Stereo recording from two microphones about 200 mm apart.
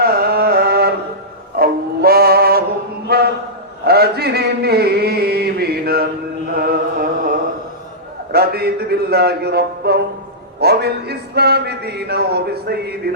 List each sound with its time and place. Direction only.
0.0 s music: 50° right (ahead or behind)
3.1 s a sound: 50° right (ahead or behind)
6.5 s chant: 50° right (ahead or behind)
8.3 s a man's voice: 50° right (ahead or behind)